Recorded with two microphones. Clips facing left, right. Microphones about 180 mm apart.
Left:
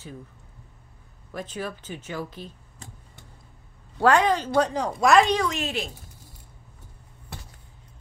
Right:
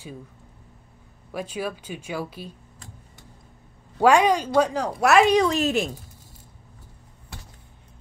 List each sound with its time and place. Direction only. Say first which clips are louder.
1.3 s speech: right 3 dB; 10° right (ahead or behind)
4.0 s speech: right 2 dB; 10° right (ahead or behind)
5.5 s speech: right 7 dB; 40° right (ahead or behind)